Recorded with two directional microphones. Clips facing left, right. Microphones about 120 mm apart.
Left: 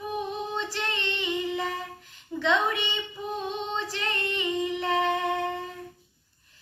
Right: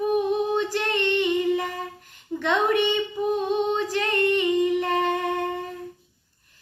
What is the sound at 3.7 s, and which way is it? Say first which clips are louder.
Singing: right 7 dB; 50° right (ahead or behind).